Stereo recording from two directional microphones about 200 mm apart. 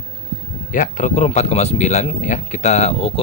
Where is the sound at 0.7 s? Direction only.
40° left (ahead or behind).